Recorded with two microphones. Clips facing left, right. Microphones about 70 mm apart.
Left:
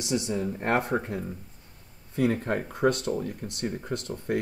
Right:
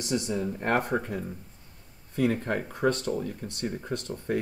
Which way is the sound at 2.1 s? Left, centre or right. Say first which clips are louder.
Left 1 dB; centre.